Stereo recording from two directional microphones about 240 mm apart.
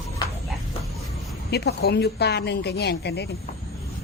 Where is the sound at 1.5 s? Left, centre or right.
Left.